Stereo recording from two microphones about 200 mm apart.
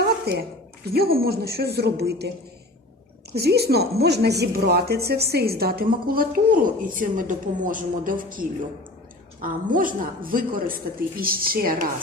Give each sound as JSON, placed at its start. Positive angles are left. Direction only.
{"t": 0.0, "sound": "a sound", "side_deg": -50}
{"t": 0.9, "sound": "speech", "side_deg": -50}
{"t": 3.3, "sound": "speech", "side_deg": -55}